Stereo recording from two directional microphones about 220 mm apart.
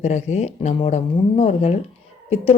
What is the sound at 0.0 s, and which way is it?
Speech, 30° left (ahead or behind).